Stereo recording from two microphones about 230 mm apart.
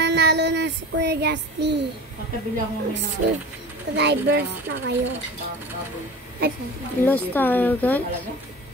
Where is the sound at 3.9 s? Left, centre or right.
Right.